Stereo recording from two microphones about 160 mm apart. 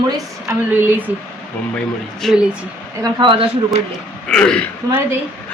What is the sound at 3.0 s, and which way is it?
Speech, 25° right (ahead or behind).